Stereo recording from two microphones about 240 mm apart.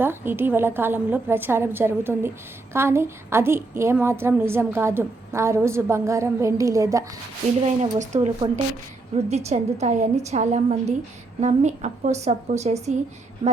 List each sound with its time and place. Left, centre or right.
0.0 s a woman's voice: centre
7.6 s a woman's voice: right